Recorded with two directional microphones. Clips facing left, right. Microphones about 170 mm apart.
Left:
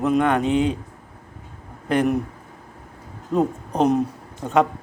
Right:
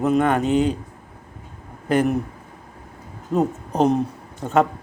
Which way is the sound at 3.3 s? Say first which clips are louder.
Even; 5° right (ahead or behind).